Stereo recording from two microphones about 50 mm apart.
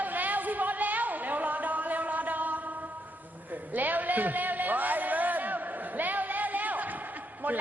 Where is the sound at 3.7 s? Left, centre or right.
Right.